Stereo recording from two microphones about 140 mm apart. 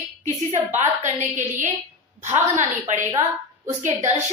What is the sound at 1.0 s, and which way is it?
A woman's voice, 60° right (ahead or behind).